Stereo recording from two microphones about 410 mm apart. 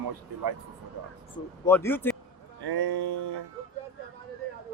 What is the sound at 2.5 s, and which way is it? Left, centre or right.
Music, right.